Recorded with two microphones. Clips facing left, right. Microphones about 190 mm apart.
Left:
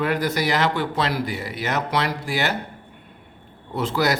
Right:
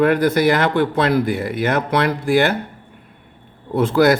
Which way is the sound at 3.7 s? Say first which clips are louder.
Right 8 dB; 55° right (ahead or behind).